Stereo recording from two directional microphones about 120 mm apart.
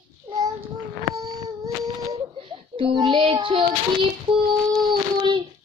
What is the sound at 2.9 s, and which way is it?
Child singing, 40° right (ahead or behind).